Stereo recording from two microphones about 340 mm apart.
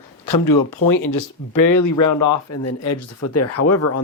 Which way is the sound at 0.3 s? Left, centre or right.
Left.